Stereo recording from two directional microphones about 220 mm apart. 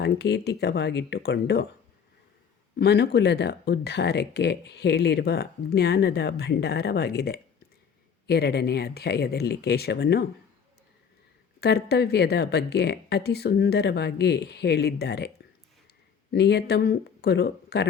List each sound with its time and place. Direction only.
0.0 s speech: 50° left (ahead or behind)
2.7 s speech: 50° left (ahead or behind)
11.6 s speech: 50° left (ahead or behind)
16.3 s speech: 50° left (ahead or behind)